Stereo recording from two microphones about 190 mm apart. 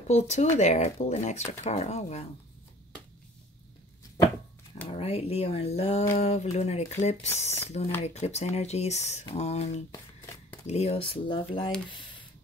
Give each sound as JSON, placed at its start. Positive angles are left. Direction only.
{"t": 0.1, "sound": "speech", "side_deg": 35}
{"t": 4.8, "sound": "speech", "side_deg": 30}